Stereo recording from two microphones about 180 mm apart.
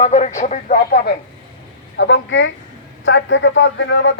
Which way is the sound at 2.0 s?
90° left.